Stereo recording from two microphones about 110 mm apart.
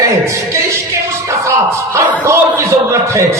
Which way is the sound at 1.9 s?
25° right (ahead or behind).